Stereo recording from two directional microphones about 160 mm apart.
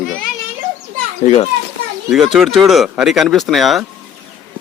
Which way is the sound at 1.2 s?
40° left (ahead or behind).